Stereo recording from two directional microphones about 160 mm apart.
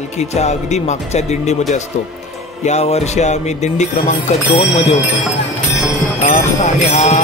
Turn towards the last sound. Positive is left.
turn(degrees=45)  # may be behind; listen again after turning